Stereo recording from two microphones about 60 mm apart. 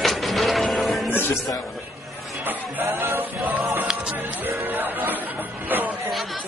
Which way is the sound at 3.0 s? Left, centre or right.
Right.